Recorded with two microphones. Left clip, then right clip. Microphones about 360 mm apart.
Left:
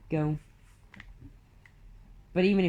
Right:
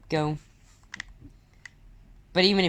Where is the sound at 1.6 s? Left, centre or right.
Right.